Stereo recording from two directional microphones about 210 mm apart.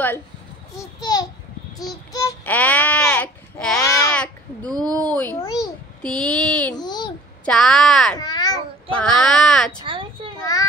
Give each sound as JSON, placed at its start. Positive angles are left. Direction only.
{"t": 0.7, "sound": "a child's voice", "side_deg": 20}
{"t": 4.6, "sound": "speech", "side_deg": -20}
{"t": 4.9, "sound": "a child's voice", "side_deg": 5}
{"t": 5.4, "sound": "a sound", "side_deg": 15}
{"t": 6.0, "sound": "speech", "side_deg": 5}
{"t": 6.8, "sound": "babbling", "side_deg": 20}
{"t": 7.4, "sound": "speech", "side_deg": 5}
{"t": 8.2, "sound": "babbling", "side_deg": 20}
{"t": 8.9, "sound": "speech", "side_deg": 5}
{"t": 9.8, "sound": "a sound", "side_deg": -25}
{"t": 10.4, "sound": "child singing", "side_deg": 15}